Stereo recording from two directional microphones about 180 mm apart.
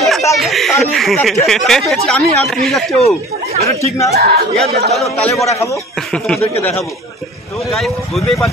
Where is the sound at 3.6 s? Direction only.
15° left (ahead or behind).